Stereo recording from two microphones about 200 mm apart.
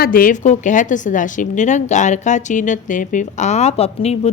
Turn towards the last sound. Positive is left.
turn(degrees=30)  # may be behind; listen again after turning